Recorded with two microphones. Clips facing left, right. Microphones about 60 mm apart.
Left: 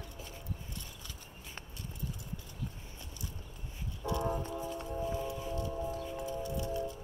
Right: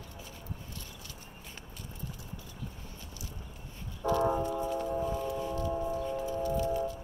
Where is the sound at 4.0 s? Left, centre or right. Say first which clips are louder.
Right 7 dB; right.